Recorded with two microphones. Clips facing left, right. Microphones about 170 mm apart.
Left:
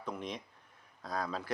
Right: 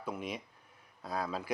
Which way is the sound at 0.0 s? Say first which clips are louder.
Right 1 dB; 10° right (ahead or behind).